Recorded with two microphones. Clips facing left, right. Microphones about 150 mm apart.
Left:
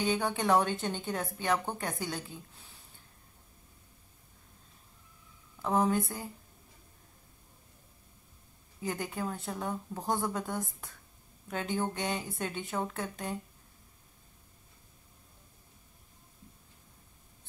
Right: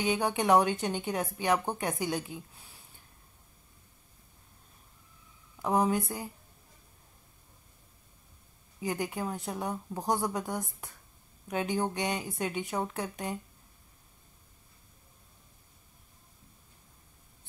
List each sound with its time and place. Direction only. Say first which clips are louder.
0.0 s speech: right 2 dB; 10° right (ahead or behind)
5.6 s speech: right 1 dB; 15° right (ahead or behind)
8.8 s speech: right 2 dB; 10° right (ahead or behind)